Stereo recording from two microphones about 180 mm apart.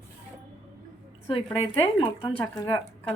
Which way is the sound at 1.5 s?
30° left (ahead or behind).